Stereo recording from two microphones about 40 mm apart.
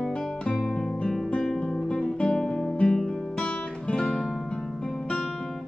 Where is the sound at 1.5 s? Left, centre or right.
Left.